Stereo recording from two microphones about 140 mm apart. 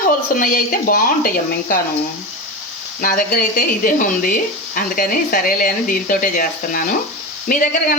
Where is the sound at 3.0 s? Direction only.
85° left.